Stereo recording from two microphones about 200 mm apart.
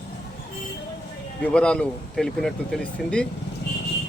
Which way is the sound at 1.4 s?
5° left (ahead or behind).